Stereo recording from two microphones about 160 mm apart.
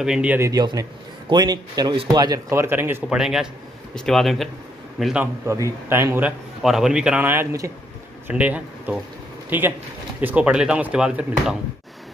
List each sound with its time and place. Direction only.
0.0 s a man's voice: 5° right (ahead or behind)
0.5 s a man's voice: 25° right (ahead or behind); by 5.3 s 5° right (ahead or behind)
5.5 s a man's voice: 15° right (ahead or behind)